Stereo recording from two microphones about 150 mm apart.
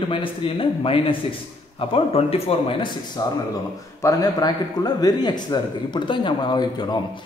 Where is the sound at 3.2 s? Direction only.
25° left (ahead or behind).